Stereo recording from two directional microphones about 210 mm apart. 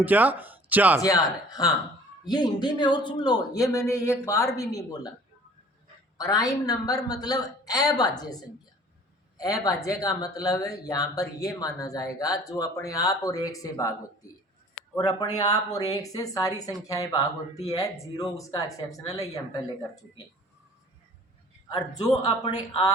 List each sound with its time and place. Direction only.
0.0 s speech: 10° right (ahead or behind)
1.0 s speech: 15° left (ahead or behind)
6.1 s speech: 15° left (ahead or behind)
14.9 s speech: 15° left (ahead or behind)
22.1 s speech: 20° left (ahead or behind)